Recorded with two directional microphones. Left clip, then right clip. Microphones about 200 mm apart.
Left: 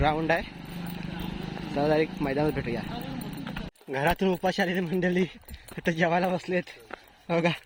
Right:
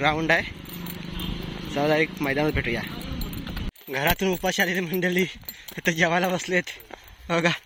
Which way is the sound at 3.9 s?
10° left (ahead or behind).